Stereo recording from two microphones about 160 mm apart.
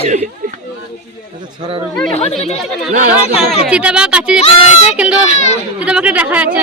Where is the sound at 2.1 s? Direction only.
45° left (ahead or behind).